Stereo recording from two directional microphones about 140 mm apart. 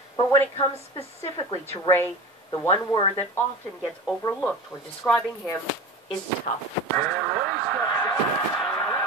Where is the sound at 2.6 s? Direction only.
25° left (ahead or behind).